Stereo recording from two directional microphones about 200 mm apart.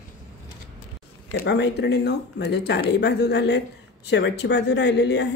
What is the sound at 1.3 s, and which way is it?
Speech, 55° left (ahead or behind).